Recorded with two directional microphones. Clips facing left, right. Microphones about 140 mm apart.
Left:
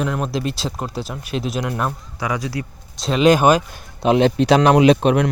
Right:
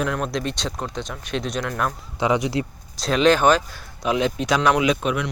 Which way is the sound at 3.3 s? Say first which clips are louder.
Left 3 dB; 10° left (ahead or behind).